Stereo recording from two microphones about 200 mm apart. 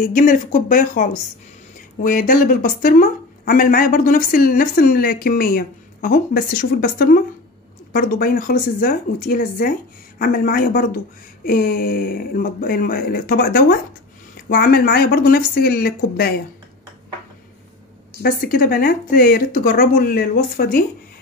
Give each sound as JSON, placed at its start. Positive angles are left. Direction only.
{"t": 0.1, "sound": "speech", "side_deg": 40}
{"t": 18.2, "sound": "speech", "side_deg": 50}